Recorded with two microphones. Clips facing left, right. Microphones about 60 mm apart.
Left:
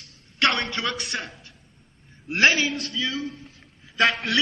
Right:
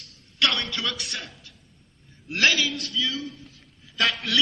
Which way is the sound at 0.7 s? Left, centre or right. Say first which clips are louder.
Left 2 dB; left.